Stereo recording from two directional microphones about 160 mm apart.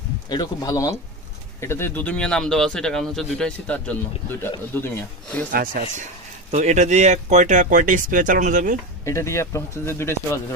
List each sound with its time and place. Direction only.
0.3 s a man's voice: 20° left (ahead or behind)
5.5 s speech: 60° right (ahead or behind)
6.5 s speech: 45° right (ahead or behind)
9.0 s a man's voice: 15° left (ahead or behind)